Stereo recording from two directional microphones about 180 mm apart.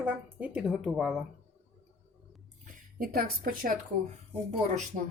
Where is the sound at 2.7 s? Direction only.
55° right (ahead or behind).